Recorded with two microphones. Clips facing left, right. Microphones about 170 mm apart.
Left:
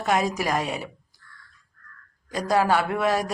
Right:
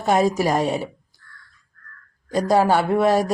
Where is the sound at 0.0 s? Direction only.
30° right (ahead or behind).